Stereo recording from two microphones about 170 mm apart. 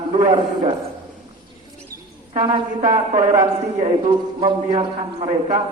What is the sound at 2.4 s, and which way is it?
Speech, 55° right (ahead or behind).